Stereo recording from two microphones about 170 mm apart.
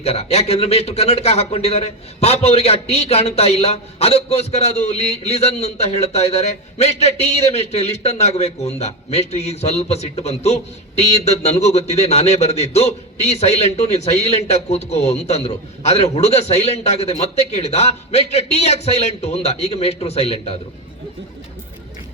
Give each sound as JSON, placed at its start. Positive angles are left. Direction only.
{"t": 0.0, "sound": "speech", "side_deg": 40}